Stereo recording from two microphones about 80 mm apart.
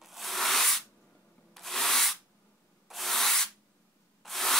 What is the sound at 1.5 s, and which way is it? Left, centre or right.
Rub, centre.